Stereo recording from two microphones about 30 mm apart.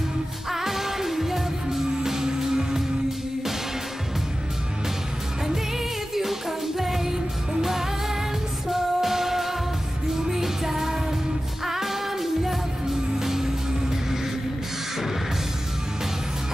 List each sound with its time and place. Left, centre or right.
0.5 s music: centre
6.8 s music: centre
8.6 s music: centre